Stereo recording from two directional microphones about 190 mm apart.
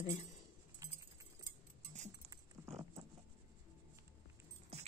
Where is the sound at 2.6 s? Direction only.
15° right (ahead or behind).